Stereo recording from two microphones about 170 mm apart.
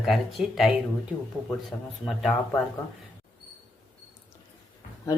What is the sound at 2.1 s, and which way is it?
Speech, 5° left (ahead or behind).